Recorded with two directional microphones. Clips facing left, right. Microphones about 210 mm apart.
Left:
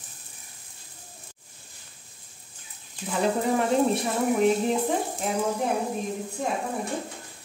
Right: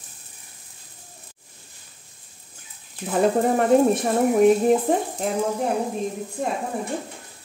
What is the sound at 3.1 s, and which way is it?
Speech, 50° right (ahead or behind).